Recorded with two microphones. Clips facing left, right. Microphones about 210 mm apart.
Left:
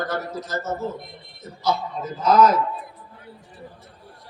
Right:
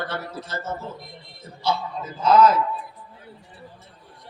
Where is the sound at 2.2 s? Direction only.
30° right (ahead or behind).